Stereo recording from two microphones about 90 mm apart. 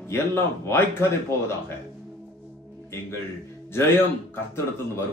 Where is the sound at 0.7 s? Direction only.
30° left (ahead or behind).